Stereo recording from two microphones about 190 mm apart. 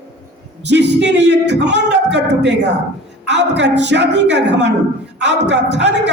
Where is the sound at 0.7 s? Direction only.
65° right (ahead or behind).